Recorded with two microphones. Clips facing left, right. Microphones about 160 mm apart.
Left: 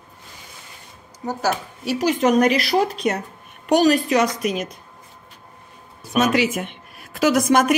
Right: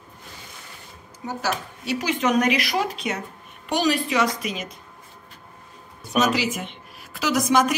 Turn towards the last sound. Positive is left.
turn(degrees=55)  # may be behind; listen again after turning